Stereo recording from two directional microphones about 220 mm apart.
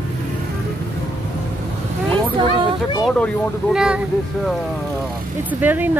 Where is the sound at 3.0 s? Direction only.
5° left (ahead or behind).